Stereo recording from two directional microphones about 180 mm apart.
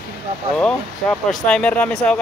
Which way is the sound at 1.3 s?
5° left (ahead or behind).